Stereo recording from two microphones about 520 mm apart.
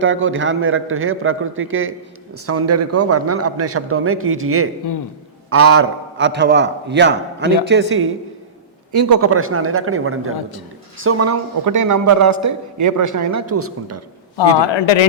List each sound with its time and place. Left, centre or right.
0.0 s a man's voice: right
8.9 s a man's voice: right
14.7 s speech: left